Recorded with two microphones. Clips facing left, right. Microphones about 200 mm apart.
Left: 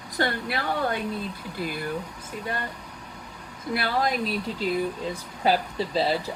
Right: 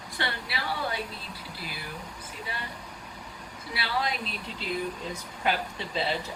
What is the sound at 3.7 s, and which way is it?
Speech, 50° left (ahead or behind).